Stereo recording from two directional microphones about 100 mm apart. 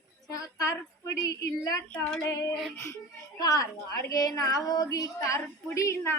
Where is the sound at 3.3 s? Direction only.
35° left (ahead or behind).